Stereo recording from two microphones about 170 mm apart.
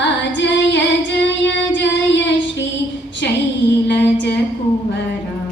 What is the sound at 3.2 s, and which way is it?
Female singing, 90° left.